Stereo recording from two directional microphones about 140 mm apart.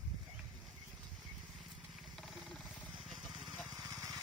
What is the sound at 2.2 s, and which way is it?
Vehicle, centre (ahead or behind).